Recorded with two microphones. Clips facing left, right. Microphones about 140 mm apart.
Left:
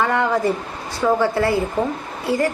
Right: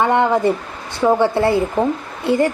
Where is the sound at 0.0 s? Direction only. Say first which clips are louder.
Right 4 dB; 25° right (ahead or behind).